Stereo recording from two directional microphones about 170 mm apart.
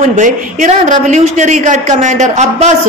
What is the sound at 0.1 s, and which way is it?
A woman's voice, 45° right (ahead or behind).